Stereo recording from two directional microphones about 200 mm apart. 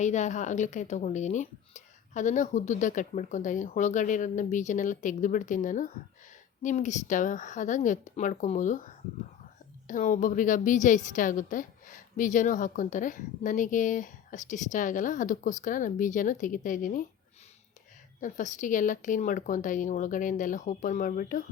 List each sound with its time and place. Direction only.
0.0 s a woman's voice: 35° left (ahead or behind)
18.2 s a woman's voice: 40° left (ahead or behind)